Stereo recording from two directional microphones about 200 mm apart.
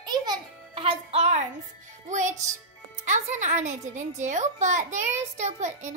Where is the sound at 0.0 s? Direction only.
20° right (ahead or behind).